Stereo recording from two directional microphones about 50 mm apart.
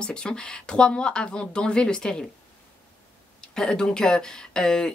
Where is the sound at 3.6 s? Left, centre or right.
Centre.